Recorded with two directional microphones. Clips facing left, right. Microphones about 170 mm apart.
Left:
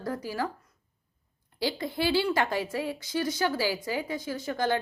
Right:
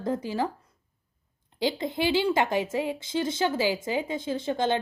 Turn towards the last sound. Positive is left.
turn(degrees=-20)  # may be behind; listen again after turning